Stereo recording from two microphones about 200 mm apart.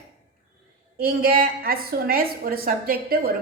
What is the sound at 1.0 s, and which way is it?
A woman's voice, 50° right (ahead or behind).